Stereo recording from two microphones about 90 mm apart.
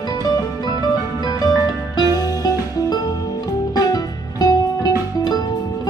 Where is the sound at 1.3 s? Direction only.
45° left (ahead or behind).